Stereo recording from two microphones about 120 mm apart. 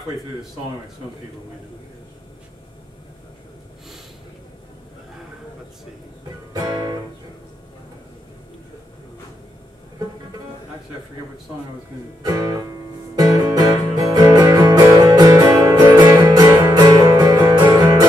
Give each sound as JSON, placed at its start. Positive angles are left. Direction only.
{"t": 6.5, "sound": "music", "side_deg": -35}
{"t": 12.2, "sound": "speech", "side_deg": -30}
{"t": 13.1, "sound": "music", "side_deg": -30}